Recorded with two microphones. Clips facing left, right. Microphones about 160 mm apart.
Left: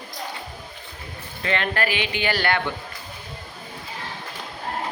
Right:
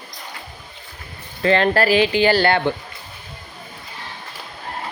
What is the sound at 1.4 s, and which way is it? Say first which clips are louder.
Speech: right 8 dB; 35° right (ahead or behind).